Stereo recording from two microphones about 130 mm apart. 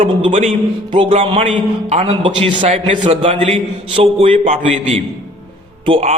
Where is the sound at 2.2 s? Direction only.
40° right (ahead or behind).